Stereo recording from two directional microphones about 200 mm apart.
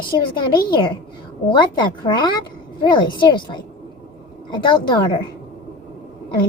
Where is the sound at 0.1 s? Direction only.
20° left (ahead or behind).